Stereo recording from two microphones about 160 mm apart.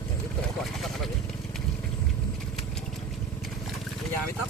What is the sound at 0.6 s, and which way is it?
Speech, centre (ahead or behind).